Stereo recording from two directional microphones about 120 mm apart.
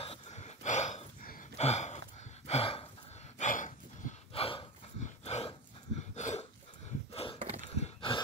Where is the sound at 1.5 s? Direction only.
65° left (ahead or behind).